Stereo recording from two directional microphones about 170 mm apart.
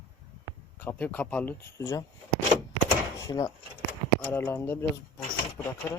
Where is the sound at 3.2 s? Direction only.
20° left (ahead or behind).